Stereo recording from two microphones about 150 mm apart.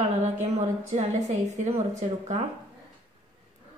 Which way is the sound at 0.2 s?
50° right (ahead or behind).